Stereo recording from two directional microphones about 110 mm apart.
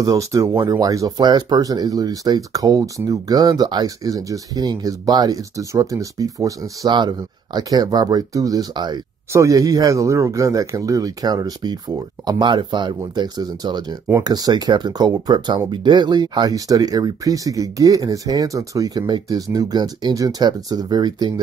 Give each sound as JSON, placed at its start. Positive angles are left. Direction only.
{"t": 0.0, "sound": "speech", "side_deg": -30}
{"t": 9.3, "sound": "a man's voice", "side_deg": -30}